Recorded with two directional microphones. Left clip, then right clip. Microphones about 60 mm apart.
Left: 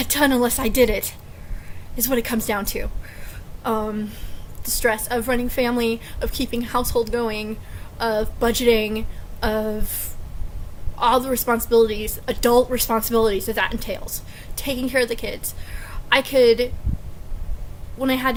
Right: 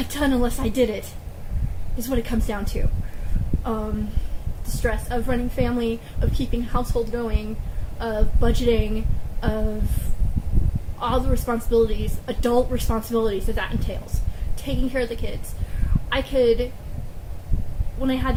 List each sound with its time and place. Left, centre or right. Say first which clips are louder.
0.1 s a woman's voice: left 5 dB; left
11.0 s a woman's voice: left 6 dB; left
18.0 s a woman's voice: left 4 dB; left